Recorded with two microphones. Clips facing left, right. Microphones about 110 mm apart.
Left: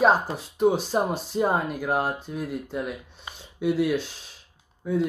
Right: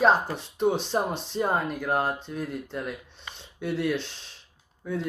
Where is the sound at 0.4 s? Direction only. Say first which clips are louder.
Left 3 dB; 5° left (ahead or behind).